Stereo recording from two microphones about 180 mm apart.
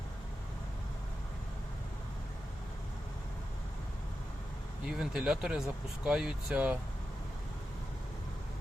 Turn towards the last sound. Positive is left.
turn(degrees=-5)  # may be behind; listen again after turning